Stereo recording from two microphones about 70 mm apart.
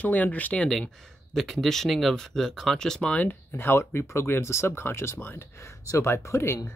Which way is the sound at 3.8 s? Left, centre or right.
Left.